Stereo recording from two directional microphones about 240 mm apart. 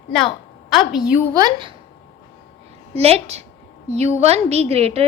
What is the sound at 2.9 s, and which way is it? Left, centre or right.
A woman's voice, right.